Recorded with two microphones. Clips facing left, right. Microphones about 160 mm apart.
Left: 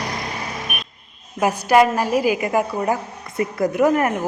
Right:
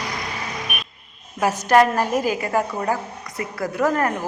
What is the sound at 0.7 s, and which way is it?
Vehicle, 45° left (ahead or behind).